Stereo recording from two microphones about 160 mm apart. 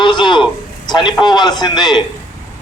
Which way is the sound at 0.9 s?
30° left (ahead or behind).